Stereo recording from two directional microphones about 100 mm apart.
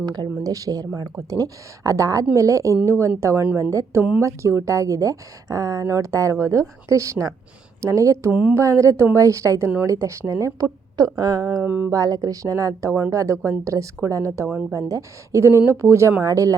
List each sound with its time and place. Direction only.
0.0 s a woman's voice: 40° right (ahead or behind)
8.3 s speech: 15° right (ahead or behind)
8.5 s speech: 30° right (ahead or behind)
11.6 s speech: 15° right (ahead or behind)
11.9 s a woman's voice: 35° right (ahead or behind)